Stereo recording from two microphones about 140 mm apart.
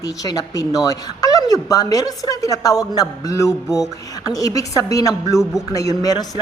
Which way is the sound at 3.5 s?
5° right (ahead or behind).